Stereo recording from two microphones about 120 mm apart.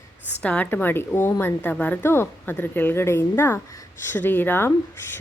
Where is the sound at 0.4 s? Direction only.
10° left (ahead or behind).